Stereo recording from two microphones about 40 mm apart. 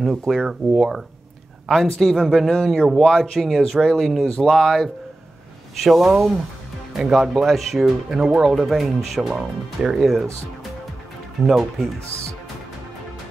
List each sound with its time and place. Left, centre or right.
0.0 s speech: centre
1.7 s speech: centre
4.4 s speech: centre
5.8 s speech: centre
8.4 s speech: centre
8.6 s speech: centre
11.4 s speech: centre